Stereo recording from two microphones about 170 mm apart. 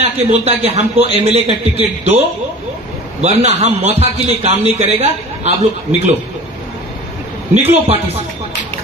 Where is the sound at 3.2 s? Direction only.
40° right (ahead or behind).